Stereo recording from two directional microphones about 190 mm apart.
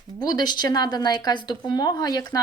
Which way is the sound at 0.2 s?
20° left (ahead or behind).